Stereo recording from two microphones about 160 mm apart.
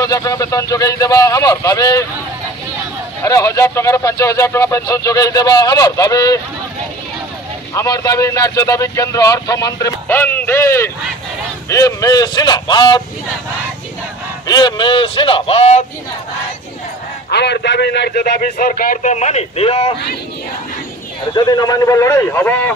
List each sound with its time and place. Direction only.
0.0 s speech: 20° left (ahead or behind)
3.2 s speech: 20° left (ahead or behind)
7.7 s speech: 20° left (ahead or behind)
14.5 s a man's voice: 30° left (ahead or behind)
17.3 s a man's voice: 90° left; by 19.9 s 40° left (ahead or behind)
21.4 s speech: 25° left (ahead or behind)